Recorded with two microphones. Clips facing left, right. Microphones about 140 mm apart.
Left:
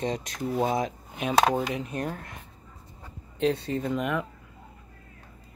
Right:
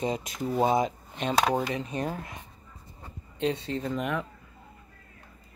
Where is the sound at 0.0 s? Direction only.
5° right (ahead or behind).